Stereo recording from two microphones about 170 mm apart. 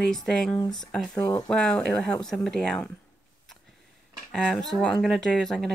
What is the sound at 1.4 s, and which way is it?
Speech, 5° left (ahead or behind).